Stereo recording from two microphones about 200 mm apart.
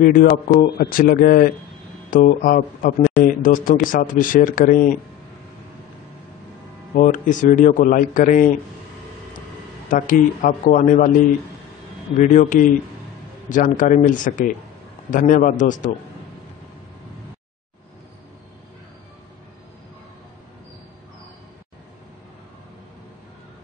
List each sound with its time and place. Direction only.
0.0 s speech: 45° left (ahead or behind)
7.0 s speech: 40° left (ahead or behind)
9.8 s speech: 40° left (ahead or behind)
12.2 s speech: 40° left (ahead or behind)